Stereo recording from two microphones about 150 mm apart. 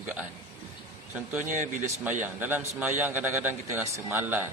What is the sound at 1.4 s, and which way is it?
Speech, 60° right (ahead or behind).